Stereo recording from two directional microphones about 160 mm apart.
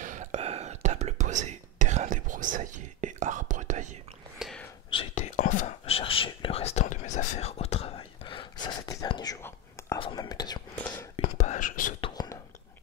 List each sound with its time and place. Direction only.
0.0 s whispering: 50° right (ahead or behind)
4.4 s whispering: centre (ahead or behind)
4.9 s whispering: 45° left (ahead or behind)
5.9 s whispering: 35° left (ahead or behind)
11.1 s whispering: 45° left (ahead or behind)
12.0 s whispering: 25° left (ahead or behind)